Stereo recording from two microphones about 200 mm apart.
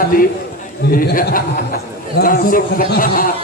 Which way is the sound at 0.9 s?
45° left (ahead or behind).